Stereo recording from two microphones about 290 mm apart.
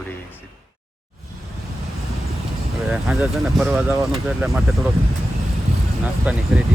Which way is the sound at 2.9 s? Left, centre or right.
Centre.